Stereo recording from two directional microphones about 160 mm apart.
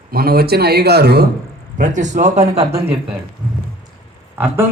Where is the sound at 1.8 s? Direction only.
50° right (ahead or behind).